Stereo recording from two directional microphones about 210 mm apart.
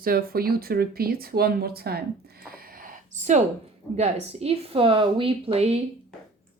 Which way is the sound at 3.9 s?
30° right (ahead or behind).